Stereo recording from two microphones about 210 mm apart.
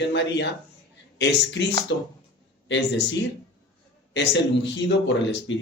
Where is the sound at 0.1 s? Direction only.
60° left (ahead or behind).